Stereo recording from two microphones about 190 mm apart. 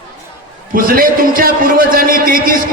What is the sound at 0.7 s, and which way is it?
A man's voice, 50° right (ahead or behind).